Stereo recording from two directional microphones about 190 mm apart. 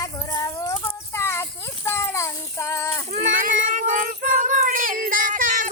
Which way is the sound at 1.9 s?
15° left (ahead or behind).